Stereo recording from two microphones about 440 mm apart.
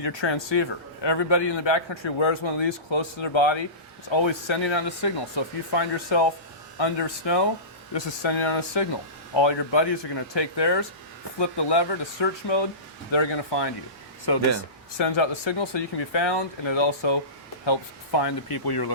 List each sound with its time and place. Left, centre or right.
0.0 s a man's voice: left
4.1 s speech: left
7.9 s a man's voice: left
14.9 s speech: left